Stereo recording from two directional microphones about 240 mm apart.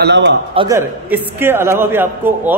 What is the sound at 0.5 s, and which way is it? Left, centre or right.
Speech, right.